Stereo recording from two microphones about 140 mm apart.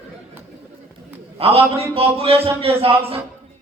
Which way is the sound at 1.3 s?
45° right (ahead or behind).